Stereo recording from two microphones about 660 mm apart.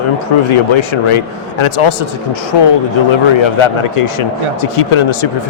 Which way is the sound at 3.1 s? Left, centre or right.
Left.